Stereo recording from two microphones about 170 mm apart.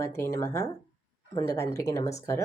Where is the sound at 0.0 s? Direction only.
15° left (ahead or behind).